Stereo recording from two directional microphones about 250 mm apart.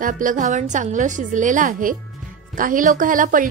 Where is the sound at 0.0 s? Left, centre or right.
Right.